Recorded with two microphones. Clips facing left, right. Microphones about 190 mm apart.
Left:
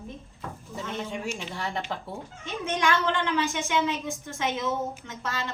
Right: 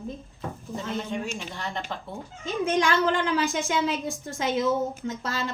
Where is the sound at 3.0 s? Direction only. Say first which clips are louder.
Right 2 dB; 35° right (ahead or behind).